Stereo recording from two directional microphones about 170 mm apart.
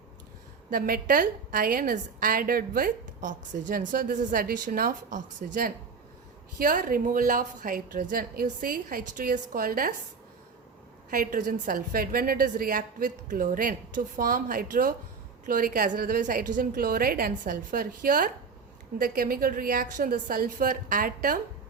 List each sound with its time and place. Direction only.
0.7 s a woman's voice: 55° right (ahead or behind)
11.1 s a woman's voice: 55° right (ahead or behind)